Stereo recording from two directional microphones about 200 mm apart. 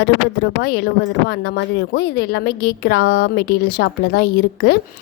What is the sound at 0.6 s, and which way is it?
Speech, 50° left (ahead or behind).